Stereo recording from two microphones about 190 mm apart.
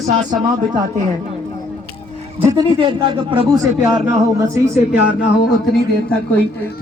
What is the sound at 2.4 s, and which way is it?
Speech, 20° right (ahead or behind).